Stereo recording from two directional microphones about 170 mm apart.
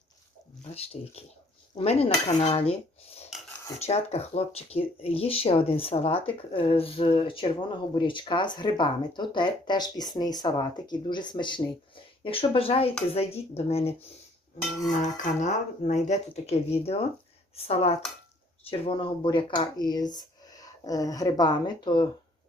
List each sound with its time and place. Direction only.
0.9 s speech: 40° left (ahead or behind)
3.8 s speech: 40° left (ahead or behind)
14.8 s cutlery: 50° left (ahead or behind)
17.5 s speech: 35° left (ahead or behind)